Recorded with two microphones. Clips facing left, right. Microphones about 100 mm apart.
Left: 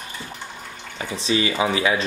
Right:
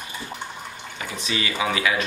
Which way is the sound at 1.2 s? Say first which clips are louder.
Left 5 dB; 30° left (ahead or behind).